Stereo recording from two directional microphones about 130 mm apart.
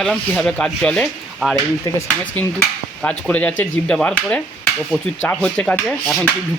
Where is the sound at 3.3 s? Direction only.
10° left (ahead or behind).